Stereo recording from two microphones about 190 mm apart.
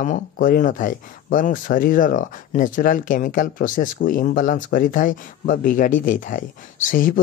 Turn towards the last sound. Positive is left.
turn(degrees=45)  # may be behind; listen again after turning